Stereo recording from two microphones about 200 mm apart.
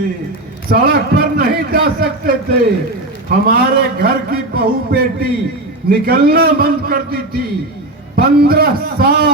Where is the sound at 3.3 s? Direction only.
50° right (ahead or behind).